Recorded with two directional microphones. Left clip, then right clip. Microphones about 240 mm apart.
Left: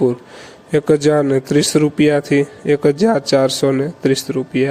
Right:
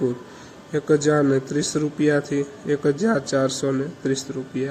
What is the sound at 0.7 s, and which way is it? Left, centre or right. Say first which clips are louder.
A man's voice: left 6 dB; left.